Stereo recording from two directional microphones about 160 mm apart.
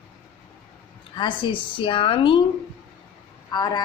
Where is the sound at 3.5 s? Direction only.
25° left (ahead or behind).